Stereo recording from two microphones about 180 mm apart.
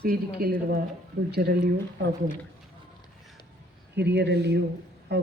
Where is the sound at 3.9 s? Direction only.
70° right (ahead or behind).